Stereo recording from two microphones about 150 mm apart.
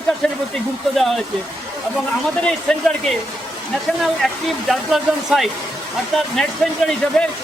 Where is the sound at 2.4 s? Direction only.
5° left (ahead or behind).